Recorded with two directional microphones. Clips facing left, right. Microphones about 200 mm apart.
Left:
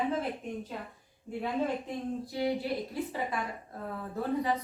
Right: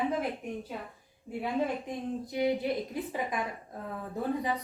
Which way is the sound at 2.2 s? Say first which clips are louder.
Right 4 dB; 20° right (ahead or behind).